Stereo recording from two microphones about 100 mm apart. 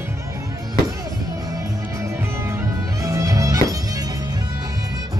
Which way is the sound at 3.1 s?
30° right (ahead or behind).